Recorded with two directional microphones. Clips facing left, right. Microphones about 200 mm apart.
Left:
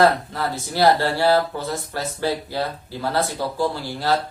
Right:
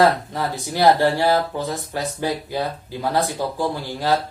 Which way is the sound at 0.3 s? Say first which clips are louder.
Even; 15° right (ahead or behind).